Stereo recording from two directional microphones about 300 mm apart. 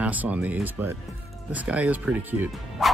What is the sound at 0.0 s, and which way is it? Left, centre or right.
Speech, centre.